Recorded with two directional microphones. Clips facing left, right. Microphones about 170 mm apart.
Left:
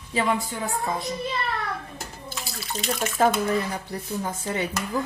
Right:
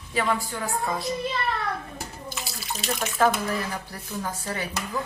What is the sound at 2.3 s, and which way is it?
Bathtub, centre (ahead or behind).